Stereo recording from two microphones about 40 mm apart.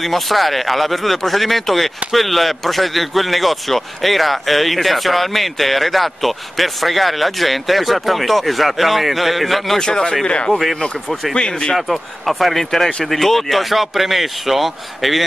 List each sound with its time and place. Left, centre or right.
0.0 s speech: centre
9.8 s speech: centre
10.2 s speech: left
11.7 s speech: centre